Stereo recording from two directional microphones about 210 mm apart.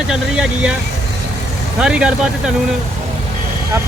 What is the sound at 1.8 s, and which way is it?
Speech, 5° right (ahead or behind).